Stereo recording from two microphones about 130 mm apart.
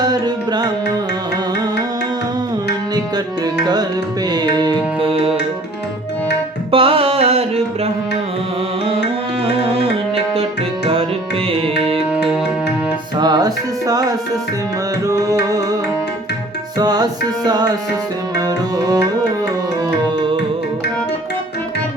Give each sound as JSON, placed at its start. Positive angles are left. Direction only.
{"t": 0.0, "sound": "music", "side_deg": -30}
{"t": 3.4, "sound": "music", "side_deg": -30}
{"t": 6.7, "sound": "music", "side_deg": -45}
{"t": 9.4, "sound": "music", "side_deg": -50}
{"t": 11.4, "sound": "tabla", "side_deg": -45}
{"t": 12.1, "sound": "music", "side_deg": -10}
{"t": 13.1, "sound": "music", "side_deg": -30}
{"t": 16.7, "sound": "music", "side_deg": -30}